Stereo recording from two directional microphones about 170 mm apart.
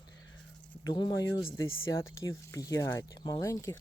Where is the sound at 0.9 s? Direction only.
25° left (ahead or behind).